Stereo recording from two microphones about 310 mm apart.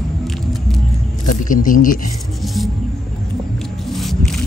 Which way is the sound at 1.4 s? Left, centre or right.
Left.